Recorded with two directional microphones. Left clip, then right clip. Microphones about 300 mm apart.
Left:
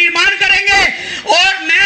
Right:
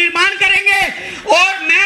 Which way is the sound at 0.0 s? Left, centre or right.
Left.